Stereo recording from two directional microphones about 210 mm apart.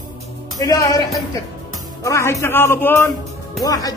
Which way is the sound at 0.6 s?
15° left (ahead or behind).